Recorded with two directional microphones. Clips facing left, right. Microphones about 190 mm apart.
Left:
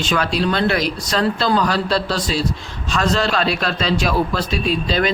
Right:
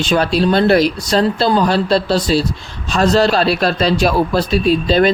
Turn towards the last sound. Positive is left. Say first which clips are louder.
# right 6 dB
turn(degrees=-35)  # may be behind; listen again after turning